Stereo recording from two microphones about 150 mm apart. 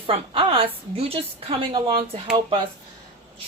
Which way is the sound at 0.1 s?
35° right (ahead or behind).